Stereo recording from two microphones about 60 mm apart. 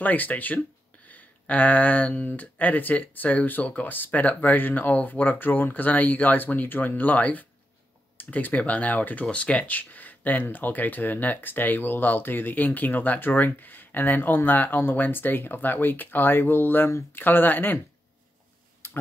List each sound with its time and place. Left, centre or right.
0.0 s speech: left
18.8 s tick-tock: left